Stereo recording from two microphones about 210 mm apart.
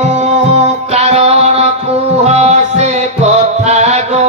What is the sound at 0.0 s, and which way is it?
Music, 35° right (ahead or behind).